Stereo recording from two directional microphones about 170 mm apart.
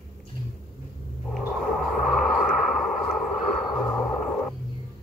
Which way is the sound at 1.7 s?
Centre (ahead or behind).